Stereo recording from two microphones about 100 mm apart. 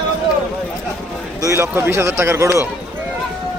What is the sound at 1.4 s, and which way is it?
Speech, 30° right (ahead or behind).